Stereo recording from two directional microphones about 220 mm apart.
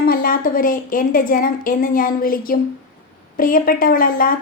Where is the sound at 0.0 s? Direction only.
40° left (ahead or behind).